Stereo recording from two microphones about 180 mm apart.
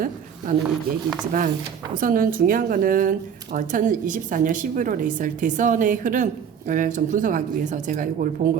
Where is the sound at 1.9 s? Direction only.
50° right (ahead or behind).